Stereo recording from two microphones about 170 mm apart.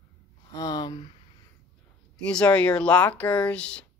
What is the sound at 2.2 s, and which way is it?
Speech, 5° left (ahead or behind).